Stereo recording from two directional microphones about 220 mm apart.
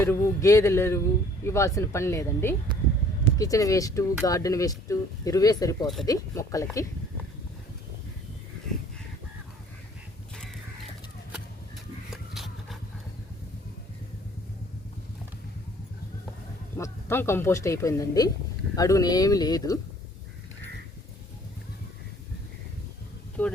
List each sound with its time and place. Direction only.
0.0 s speech: 10° left (ahead or behind)
12.1 s a sound: centre (ahead or behind)
16.7 s speech: 10° left (ahead or behind)
23.4 s speech: 5° left (ahead or behind)